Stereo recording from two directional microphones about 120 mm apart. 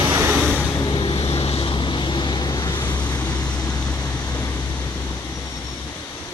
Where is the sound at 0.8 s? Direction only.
40° left (ahead or behind).